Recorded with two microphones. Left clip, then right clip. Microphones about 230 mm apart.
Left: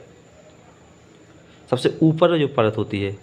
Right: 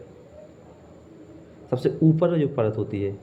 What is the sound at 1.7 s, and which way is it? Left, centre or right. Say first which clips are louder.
Speech: left 3 dB; left.